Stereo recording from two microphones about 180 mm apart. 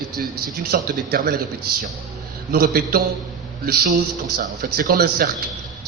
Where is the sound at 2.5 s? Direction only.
55° right (ahead or behind).